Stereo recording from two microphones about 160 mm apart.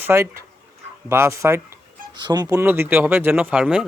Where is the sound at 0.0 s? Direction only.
15° right (ahead or behind).